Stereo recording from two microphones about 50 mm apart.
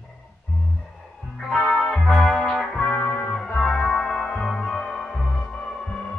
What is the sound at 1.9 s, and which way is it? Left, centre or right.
Music, centre.